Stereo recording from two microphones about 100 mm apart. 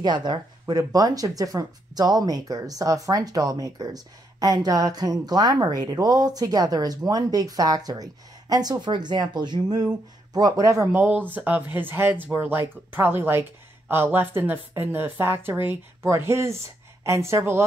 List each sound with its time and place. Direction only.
0.0 s speech: 45° right (ahead or behind); by 11.0 s 30° right (ahead or behind)
11.0 s speech: 15° right (ahead or behind)